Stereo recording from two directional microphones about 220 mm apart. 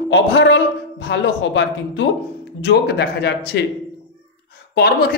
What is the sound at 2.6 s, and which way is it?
A man's voice, 50° left (ahead or behind).